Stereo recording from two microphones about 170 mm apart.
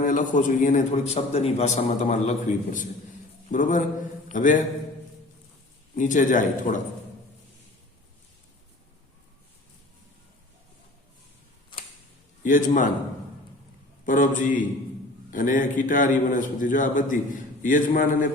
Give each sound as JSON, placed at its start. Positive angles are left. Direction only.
{"t": 0.0, "sound": "a man's voice", "side_deg": 50}
{"t": 3.5, "sound": "a man's voice", "side_deg": 50}
{"t": 6.0, "sound": "a man's voice", "side_deg": 50}
{"t": 12.4, "sound": "a man's voice", "side_deg": 50}
{"t": 14.0, "sound": "a man's voice", "side_deg": 50}